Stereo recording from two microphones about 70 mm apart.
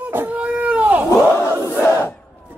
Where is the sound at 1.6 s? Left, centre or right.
Left.